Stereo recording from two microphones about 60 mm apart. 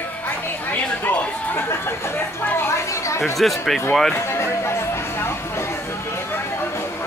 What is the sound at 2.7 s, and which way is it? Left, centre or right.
Chatter, left.